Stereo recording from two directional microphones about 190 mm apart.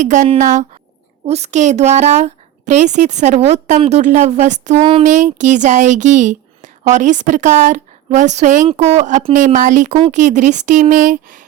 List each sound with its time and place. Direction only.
0.0 s a woman's voice: 40° right (ahead or behind)
5.0 s a woman's voice: 40° right (ahead or behind)